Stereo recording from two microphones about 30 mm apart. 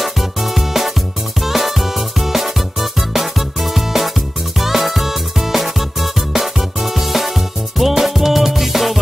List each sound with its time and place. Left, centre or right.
0.0 s music: centre